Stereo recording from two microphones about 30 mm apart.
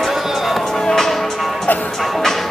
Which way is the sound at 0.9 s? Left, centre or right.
Centre.